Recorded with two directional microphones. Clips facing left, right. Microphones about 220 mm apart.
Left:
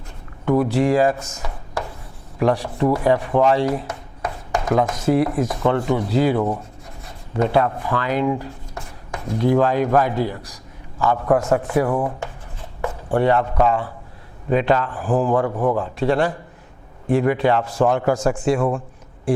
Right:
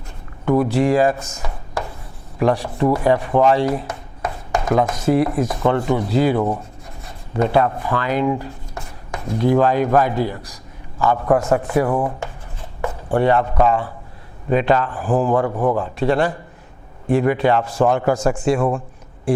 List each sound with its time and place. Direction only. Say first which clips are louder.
0.4 s a man's voice: right 1 dB; 20° right (ahead or behind)
1.5 s a sound: right 1 dB; 20° right (ahead or behind)
2.4 s a man's voice: right 1 dB; 15° right (ahead or behind)
2.6 s a man's voice: right 1 dB; 25° right (ahead or behind)
2.9 s chopping: right 1 dB; 15° right (ahead or behind)
7.3 s speech: right 1 dB; 15° right (ahead or behind)
11.2 s a man's voice: even; 25° right (ahead or behind)
12.8 s chopping: right 1 dB; 20° right (ahead or behind)
13.2 s a man's voice: right 1 dB; 15° right (ahead or behind)